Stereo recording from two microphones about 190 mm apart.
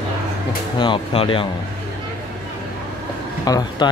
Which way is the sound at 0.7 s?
25° left (ahead or behind).